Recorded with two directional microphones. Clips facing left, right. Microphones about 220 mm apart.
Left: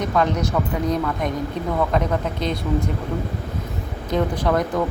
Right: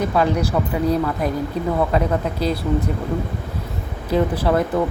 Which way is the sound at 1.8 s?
10° right (ahead or behind).